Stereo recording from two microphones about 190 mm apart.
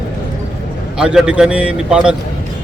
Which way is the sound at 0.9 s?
5° right (ahead or behind).